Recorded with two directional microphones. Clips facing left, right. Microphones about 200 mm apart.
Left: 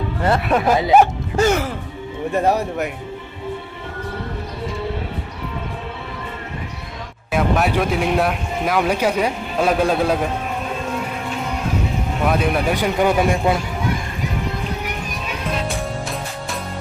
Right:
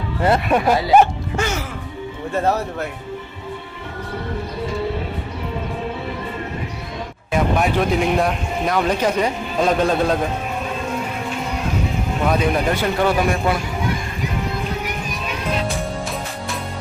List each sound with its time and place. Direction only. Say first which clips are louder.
0.4 s speech: even; centre (ahead or behind)
1.4 s music: left 7 dB; 50° left (ahead or behind)
2.3 s speech: left 2 dB; 15° left (ahead or behind)
7.3 s speech: even; 5° left (ahead or behind)
12.3 s a man's voice: even; 5° left (ahead or behind); by 13.6 s 20° left (ahead or behind)